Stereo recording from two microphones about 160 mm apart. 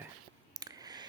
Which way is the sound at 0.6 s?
25° right (ahead or behind).